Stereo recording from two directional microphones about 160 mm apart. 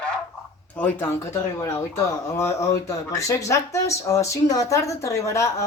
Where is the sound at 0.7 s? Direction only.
10° left (ahead or behind).